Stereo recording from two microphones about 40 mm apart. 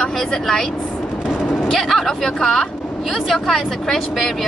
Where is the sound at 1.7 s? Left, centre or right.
Centre.